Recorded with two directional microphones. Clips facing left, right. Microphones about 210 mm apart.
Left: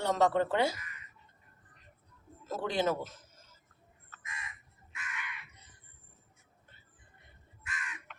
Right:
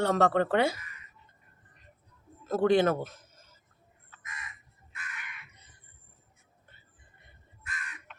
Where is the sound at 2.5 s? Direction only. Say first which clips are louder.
Right 8 dB; 55° right (ahead or behind).